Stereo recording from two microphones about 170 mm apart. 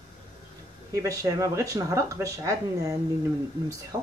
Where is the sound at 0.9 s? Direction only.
20° right (ahead or behind).